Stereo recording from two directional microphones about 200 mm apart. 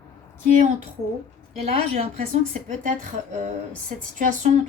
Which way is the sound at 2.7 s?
40° right (ahead or behind).